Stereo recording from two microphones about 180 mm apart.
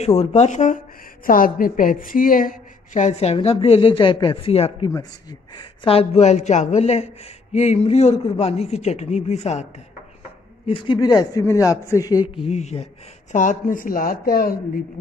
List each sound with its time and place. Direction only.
0.0 s a woman's voice: 35° left (ahead or behind)
10.7 s a man's voice: 30° left (ahead or behind)
12.4 s a woman's voice: 40° left (ahead or behind); by 14.5 s 55° left (ahead or behind)